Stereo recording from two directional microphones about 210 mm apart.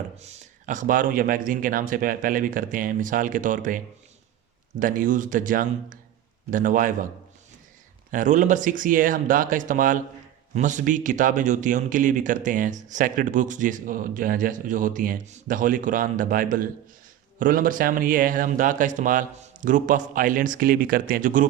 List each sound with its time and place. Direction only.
0.2 s a man's voice: 30° right (ahead or behind)
4.8 s a man's voice: 40° right (ahead or behind)
8.1 s a man's voice: 35° right (ahead or behind)